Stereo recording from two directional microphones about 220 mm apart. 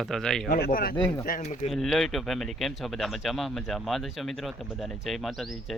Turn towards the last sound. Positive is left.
turn(degrees=0)  # may be behind; listen again after turning